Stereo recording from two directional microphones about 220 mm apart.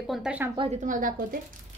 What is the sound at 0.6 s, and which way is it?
Speech, 35° right (ahead or behind).